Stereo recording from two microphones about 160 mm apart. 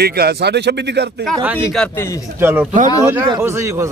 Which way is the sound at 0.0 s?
85° right.